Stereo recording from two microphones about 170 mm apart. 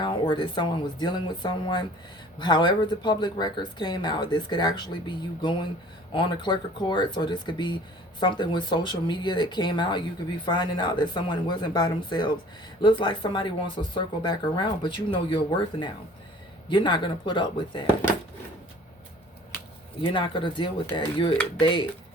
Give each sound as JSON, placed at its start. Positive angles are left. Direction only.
{"t": 0.0, "sound": "speech", "side_deg": 30}
{"t": 20.0, "sound": "speech", "side_deg": 30}